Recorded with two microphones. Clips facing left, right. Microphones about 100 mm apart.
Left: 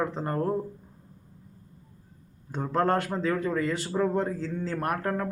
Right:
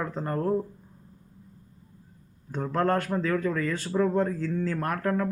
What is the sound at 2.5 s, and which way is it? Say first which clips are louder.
Speech: even; 20° left (ahead or behind).